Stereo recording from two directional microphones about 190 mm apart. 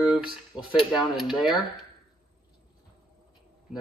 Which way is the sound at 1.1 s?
Centre (ahead or behind).